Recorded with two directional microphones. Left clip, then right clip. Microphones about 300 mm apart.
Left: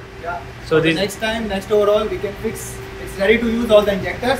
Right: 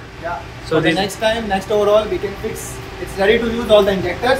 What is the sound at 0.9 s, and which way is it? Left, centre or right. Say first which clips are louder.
A woman's voice: right 3 dB; centre.